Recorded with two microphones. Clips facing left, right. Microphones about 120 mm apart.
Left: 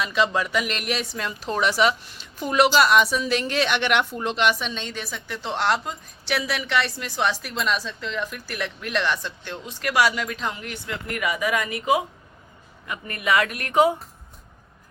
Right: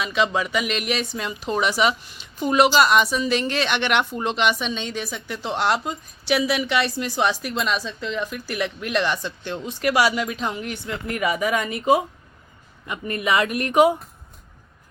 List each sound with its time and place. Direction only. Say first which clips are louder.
0.0 s a woman's voice: right 1 dB; centre (ahead or behind); by 13.9 s 20° right (ahead or behind)